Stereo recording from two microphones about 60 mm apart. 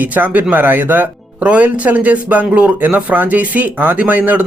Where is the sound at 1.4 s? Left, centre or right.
Right.